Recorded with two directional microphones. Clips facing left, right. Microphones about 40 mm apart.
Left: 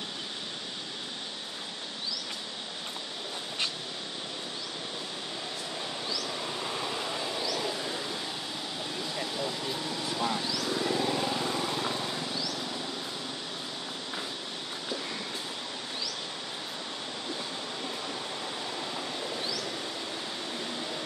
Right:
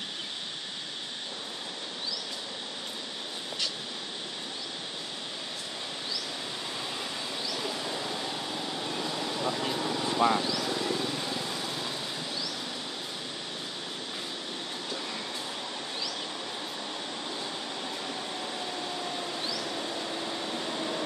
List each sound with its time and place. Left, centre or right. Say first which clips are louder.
7.4 s a sound: left 1 dB; centre
9.4 s vehicle: right 3 dB; right
10.4 s vehicle: right 1 dB; centre
10.8 s vehicle: left 2 dB; centre
11.6 s vehicle: left 3 dB; left
20.5 s a sound: right 3 dB; centre